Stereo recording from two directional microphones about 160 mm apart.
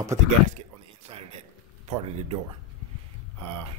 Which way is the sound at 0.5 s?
45° right (ahead or behind).